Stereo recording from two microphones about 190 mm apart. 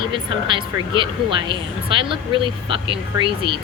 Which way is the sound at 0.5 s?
25° right (ahead or behind).